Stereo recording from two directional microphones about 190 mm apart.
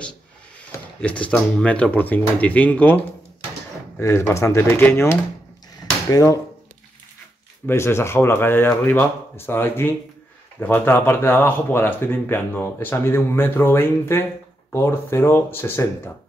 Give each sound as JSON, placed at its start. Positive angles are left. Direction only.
{"t": 0.7, "sound": "speech", "side_deg": 5}
{"t": 4.0, "sound": "speech", "side_deg": 15}
{"t": 7.6, "sound": "speech", "side_deg": 15}